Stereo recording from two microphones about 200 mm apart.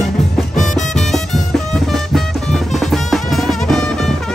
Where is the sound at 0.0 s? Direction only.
Centre (ahead or behind).